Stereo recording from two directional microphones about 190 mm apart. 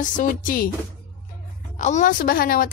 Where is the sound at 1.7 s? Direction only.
40° left (ahead or behind).